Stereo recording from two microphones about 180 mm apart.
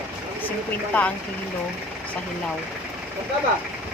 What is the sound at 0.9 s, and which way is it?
Speech, 10° left (ahead or behind).